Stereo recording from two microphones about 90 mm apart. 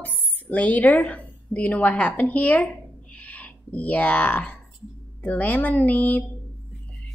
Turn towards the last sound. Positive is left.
turn(degrees=20)  # may be behind; listen again after turning